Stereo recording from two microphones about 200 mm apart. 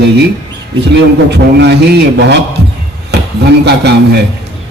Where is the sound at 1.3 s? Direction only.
55° right (ahead or behind).